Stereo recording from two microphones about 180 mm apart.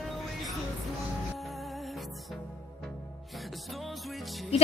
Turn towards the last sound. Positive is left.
turn(degrees=0)  # may be behind; listen again after turning